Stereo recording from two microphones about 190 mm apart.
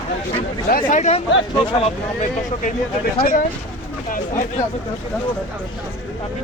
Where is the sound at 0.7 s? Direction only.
45° left (ahead or behind).